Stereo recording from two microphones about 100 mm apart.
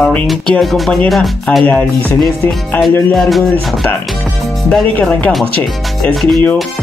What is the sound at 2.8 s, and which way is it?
Speech, centre (ahead or behind).